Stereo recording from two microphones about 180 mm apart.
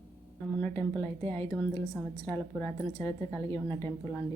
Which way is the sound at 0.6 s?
10° left (ahead or behind).